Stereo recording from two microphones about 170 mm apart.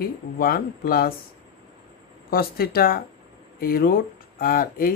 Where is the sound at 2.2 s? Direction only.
60° left (ahead or behind).